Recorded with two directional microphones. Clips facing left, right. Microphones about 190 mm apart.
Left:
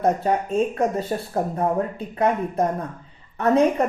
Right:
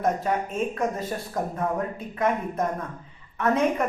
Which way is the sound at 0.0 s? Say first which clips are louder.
Left 4 dB; 35° left (ahead or behind).